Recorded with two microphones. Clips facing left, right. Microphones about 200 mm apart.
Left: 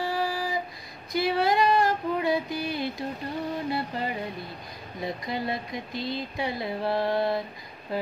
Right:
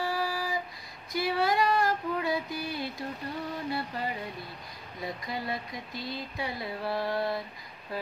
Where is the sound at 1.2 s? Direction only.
20° left (ahead or behind).